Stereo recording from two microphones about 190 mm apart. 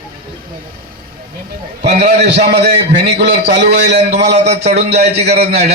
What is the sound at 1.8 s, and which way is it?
A man's voice, 60° right (ahead or behind).